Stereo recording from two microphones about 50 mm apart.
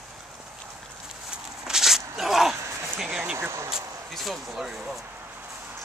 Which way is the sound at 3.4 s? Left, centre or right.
Right.